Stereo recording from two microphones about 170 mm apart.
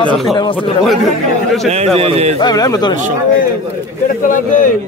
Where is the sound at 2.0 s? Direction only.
35° right (ahead or behind).